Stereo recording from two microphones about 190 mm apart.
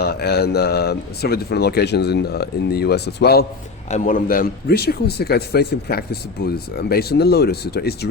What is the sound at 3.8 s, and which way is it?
Speech, 40° left (ahead or behind).